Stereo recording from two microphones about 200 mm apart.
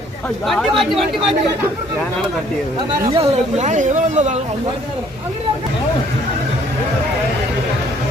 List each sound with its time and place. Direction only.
0.8 s speech: centre (ahead or behind)
3.1 s speech: 30° right (ahead or behind)